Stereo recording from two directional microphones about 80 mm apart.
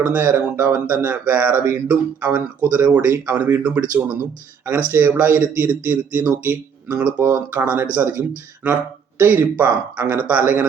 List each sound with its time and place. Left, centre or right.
0.0 s speech: right